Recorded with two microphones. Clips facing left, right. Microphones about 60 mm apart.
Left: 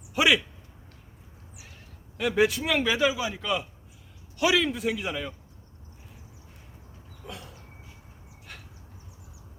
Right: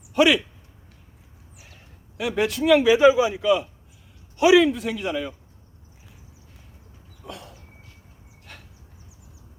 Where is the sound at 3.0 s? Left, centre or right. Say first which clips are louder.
Right 10 dB; right.